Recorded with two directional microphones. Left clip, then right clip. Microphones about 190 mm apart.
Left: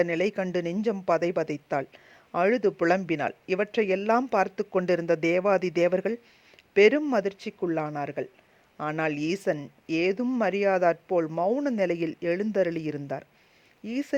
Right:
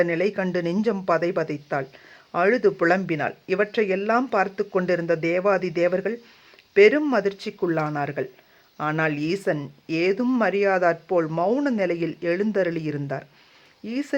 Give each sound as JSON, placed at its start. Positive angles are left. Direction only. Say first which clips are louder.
{"t": 0.0, "sound": "speech", "louder": "right 3 dB", "side_deg": 40}
{"t": 11.8, "sound": "speech", "louder": "right 2 dB", "side_deg": 45}